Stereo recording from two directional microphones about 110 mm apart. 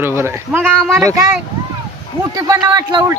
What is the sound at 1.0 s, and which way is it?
Speech, 30° right (ahead or behind).